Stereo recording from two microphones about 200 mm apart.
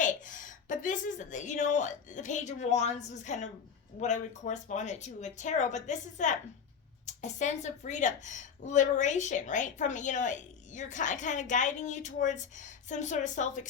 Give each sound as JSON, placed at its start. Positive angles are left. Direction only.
{"t": 0.0, "sound": "a woman's voice", "side_deg": 40}